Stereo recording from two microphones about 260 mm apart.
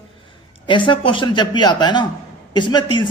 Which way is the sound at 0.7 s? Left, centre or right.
Centre.